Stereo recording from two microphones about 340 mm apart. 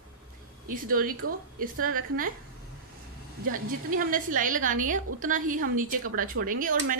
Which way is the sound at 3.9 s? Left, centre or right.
Right.